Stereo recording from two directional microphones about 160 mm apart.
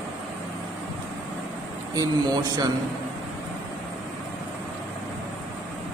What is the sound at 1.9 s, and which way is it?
Speech, 25° right (ahead or behind).